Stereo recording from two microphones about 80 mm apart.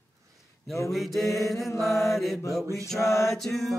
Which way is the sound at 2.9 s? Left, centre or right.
Left.